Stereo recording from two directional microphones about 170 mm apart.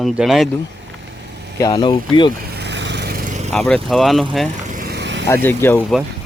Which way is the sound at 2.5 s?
85° right.